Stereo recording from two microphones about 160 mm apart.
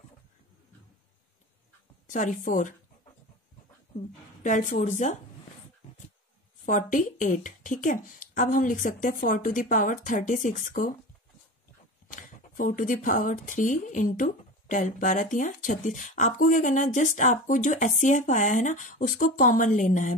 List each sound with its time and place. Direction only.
2.0 s a woman's voice: 55° left (ahead or behind)
4.4 s speech: 55° left (ahead or behind)
6.6 s a woman's voice: 55° left (ahead or behind)
12.1 s speech: 55° left (ahead or behind)